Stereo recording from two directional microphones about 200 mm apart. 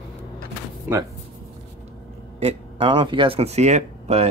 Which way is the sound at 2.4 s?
25° right (ahead or behind).